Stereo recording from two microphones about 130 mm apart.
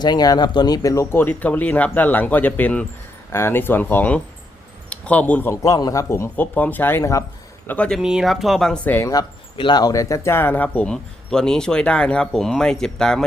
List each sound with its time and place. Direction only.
0.0 s speech: 30° left (ahead or behind); by 5.5 s 15° left (ahead or behind)
5.6 s speech: 25° left (ahead or behind)
7.7 s speech: 5° left (ahead or behind)
9.6 s speech: 35° left (ahead or behind); by 13.2 s 5° left (ahead or behind)